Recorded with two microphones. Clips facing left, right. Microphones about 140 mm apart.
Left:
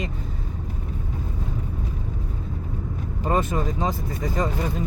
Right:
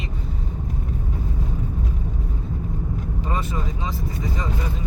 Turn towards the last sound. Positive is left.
turn(degrees=50)  # may be behind; listen again after turning